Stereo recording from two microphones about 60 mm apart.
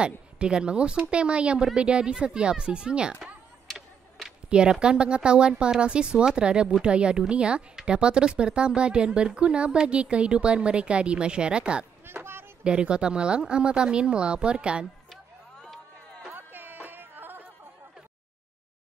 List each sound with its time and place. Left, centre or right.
0.0 s a woman's voice: centre
4.5 s a woman's voice: centre
12.1 s a sound: right
12.6 s a woman's voice: centre
15.6 s music: centre
16.3 s music: right